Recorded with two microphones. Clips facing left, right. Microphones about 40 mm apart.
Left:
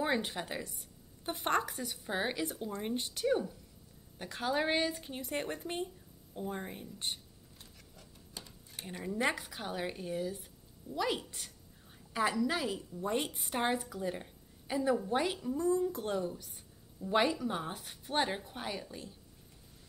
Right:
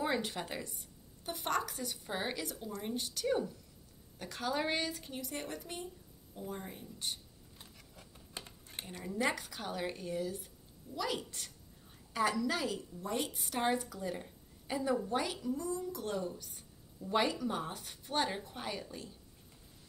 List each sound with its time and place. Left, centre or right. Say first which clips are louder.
0.0 s a sound: left 2 dB; centre
0.3 s a woman's voice: left 1 dB; centre
1.2 s speech: left 3 dB; left
1.7 s speech: left 2 dB; centre
2.6 s speech: left 3 dB; left
3.3 s speech: left 2 dB; centre
5.1 s speech: left 4 dB; left
7.5 s a sound: right 1 dB; centre
8.4 s a sound: right 2 dB; right
8.8 s speech: left 2 dB; centre
13.0 s a woman's voice: left 4 dB; left; by 15.0 s centre
15.0 s speech: left 2 dB; centre; by 16.1 s left
16.1 s speech: left 3 dB; centre